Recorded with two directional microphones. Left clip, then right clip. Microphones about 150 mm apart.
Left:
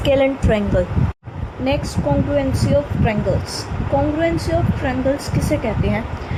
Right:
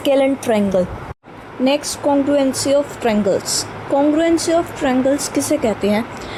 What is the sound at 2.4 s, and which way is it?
Speech, 55° right (ahead or behind).